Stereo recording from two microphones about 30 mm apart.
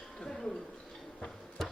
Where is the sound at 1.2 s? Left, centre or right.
Left.